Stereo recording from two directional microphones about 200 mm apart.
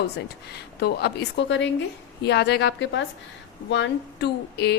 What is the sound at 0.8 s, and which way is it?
A woman's voice, 55° left (ahead or behind).